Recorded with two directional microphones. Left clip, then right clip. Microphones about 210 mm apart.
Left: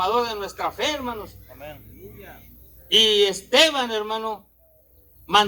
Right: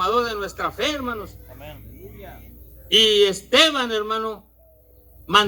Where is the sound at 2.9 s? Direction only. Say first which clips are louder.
Right 1 dB; 20° right (ahead or behind).